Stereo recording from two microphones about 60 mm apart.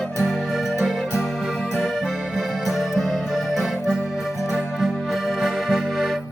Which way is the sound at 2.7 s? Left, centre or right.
Centre.